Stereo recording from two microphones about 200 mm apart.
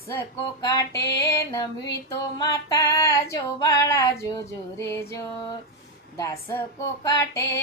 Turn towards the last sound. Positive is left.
turn(degrees=15)  # may be behind; listen again after turning